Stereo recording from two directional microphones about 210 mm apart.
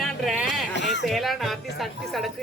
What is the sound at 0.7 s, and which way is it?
Speech, 55° left (ahead or behind).